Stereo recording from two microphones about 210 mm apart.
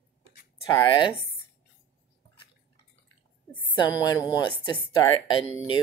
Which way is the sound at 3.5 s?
20° left (ahead or behind).